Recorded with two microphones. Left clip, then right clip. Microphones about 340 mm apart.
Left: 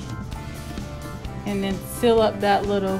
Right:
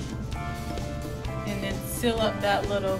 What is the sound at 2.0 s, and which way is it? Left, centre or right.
Speech, left.